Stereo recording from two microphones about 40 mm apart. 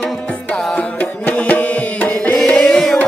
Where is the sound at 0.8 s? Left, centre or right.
Left.